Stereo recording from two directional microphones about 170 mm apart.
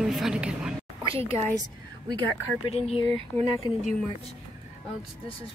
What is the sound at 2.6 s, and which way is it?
Speech, 35° left (ahead or behind).